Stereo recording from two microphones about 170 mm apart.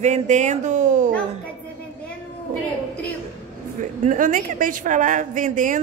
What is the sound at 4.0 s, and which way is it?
A woman's voice, 50° right (ahead or behind).